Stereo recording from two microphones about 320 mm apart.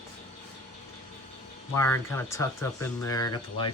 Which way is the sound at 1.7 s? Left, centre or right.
Centre.